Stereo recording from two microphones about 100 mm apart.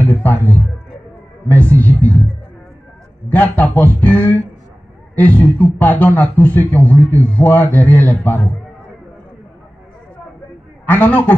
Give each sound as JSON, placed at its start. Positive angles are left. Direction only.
{"t": 0.0, "sound": "music", "side_deg": 20}
{"t": 1.5, "sound": "a man's voice", "side_deg": 20}
{"t": 3.3, "sound": "a man's voice", "side_deg": 15}
{"t": 10.9, "sound": "a man's voice", "side_deg": 20}